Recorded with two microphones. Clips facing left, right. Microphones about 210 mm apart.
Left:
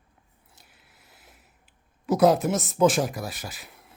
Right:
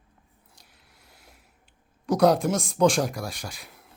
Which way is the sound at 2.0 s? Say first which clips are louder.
Even; 5° left (ahead or behind).